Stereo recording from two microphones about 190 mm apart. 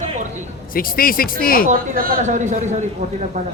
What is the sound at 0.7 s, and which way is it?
Speech, 50° left (ahead or behind).